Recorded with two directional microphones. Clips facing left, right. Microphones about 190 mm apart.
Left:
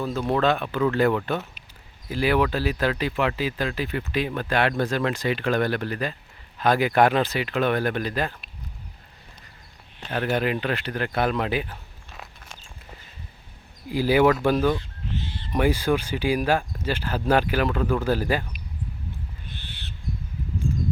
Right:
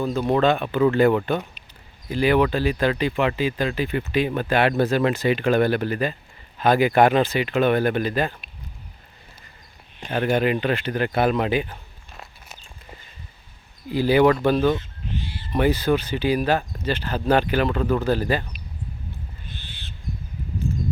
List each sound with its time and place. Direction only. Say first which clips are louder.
0.0 s speech: right 3 dB; centre (ahead or behind)
10.0 s speech: right 3 dB; 15° right (ahead or behind)
10.3 s speech: right 4 dB; centre (ahead or behind)
13.9 s speech: right 2 dB; 10° left (ahead or behind)
14.8 s a sound: right 1 dB; 15° right (ahead or behind)
15.5 s speech: right 2 dB; 10° left (ahead or behind)
19.5 s owl: even; 60° left (ahead or behind)